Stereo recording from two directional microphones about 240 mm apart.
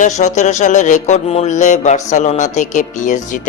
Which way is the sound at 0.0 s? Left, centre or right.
Left.